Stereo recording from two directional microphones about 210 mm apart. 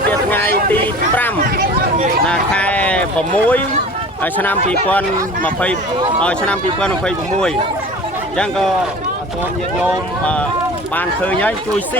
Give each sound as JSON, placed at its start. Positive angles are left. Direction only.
{"t": 0.1, "sound": "vehicle", "side_deg": 10}
{"t": 0.7, "sound": "a sound", "side_deg": 10}
{"t": 4.2, "sound": "speech", "side_deg": 10}
{"t": 10.9, "sound": "speech", "side_deg": 5}